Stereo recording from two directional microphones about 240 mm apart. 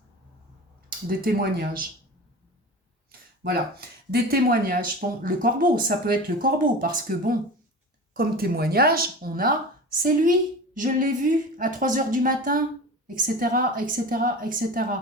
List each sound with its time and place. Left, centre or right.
0.9 s speech: right
3.1 s speech: right